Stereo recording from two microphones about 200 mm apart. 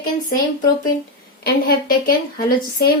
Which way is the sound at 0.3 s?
45° left (ahead or behind).